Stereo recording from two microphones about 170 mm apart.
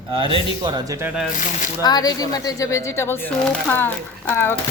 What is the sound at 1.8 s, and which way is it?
Speech, 25° left (ahead or behind).